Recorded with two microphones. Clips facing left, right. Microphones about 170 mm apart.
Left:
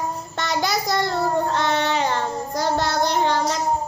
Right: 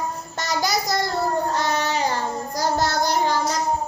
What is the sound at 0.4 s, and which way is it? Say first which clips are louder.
Child singing: even; 40° right (ahead or behind).